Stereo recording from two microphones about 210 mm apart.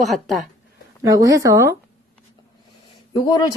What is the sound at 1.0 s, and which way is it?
Speech, 15° right (ahead or behind).